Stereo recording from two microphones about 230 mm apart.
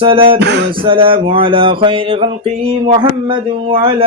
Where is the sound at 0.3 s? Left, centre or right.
Right.